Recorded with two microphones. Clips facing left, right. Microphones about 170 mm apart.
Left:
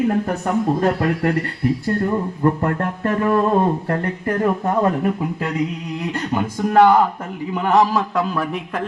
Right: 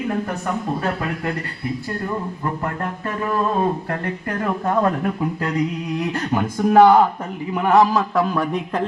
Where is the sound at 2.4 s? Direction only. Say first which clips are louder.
Left 6 dB; 50° left (ahead or behind).